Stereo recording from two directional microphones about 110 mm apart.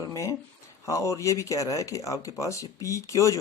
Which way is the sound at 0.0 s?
30° left (ahead or behind).